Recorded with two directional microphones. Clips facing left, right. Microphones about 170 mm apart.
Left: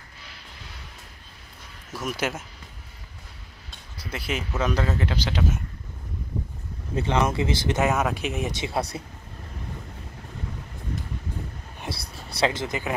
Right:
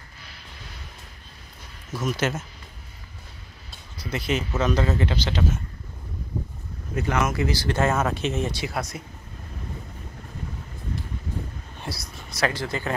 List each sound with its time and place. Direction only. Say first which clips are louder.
1.9 s speech: right 3 dB; 10° left (ahead or behind)
4.0 s speech: right 4 dB; 5° left (ahead or behind)
4.8 s speech: right 2 dB; 5° right (ahead or behind)
5.1 s speech: right 1 dB; 10° left (ahead or behind)
7.0 s speech: left 1 dB; 30° left (ahead or behind)
11.8 s speech: left 1 dB; 25° left (ahead or behind)